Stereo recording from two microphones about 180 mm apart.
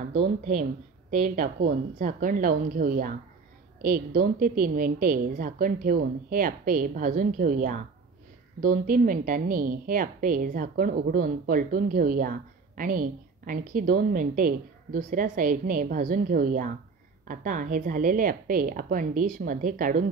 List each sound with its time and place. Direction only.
1.1 s a woman's voice: 50° right (ahead or behind)